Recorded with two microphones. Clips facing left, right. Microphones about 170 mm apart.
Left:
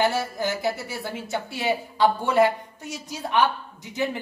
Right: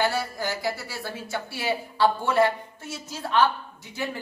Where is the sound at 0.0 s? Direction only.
20° left (ahead or behind).